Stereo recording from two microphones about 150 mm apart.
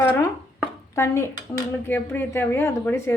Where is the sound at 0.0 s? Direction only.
15° left (ahead or behind).